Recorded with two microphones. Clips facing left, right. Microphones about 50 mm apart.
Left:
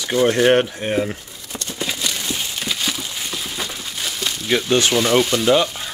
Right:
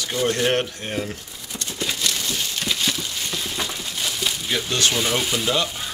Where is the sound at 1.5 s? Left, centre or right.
Centre.